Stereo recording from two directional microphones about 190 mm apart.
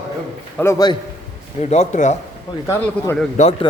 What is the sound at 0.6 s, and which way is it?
Speech, 15° left (ahead or behind).